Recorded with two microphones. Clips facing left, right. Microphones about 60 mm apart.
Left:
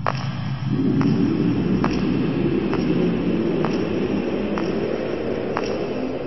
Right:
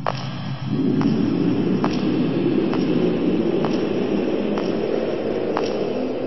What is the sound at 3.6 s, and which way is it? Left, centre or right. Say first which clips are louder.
Vehicle: right 1 dB; left.